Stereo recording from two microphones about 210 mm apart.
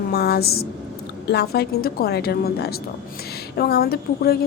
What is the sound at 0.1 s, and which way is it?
A woman's voice, 50° left (ahead or behind).